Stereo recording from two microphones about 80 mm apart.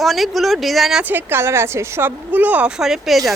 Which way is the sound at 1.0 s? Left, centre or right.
Right.